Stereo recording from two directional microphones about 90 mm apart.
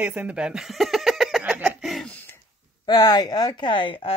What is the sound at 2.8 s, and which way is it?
Speech, 50° left (ahead or behind).